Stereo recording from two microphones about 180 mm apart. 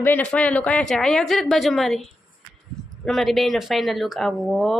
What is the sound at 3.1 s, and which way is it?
A woman's voice, centre (ahead or behind).